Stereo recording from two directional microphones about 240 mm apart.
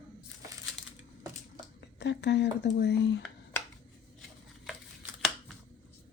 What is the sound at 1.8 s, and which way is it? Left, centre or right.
Speech, left.